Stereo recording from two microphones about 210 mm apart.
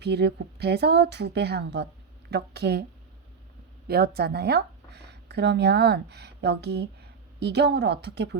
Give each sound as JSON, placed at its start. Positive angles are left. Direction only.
{"t": 0.0, "sound": "a woman's voice", "side_deg": -50}
{"t": 3.8, "sound": "speech", "side_deg": -50}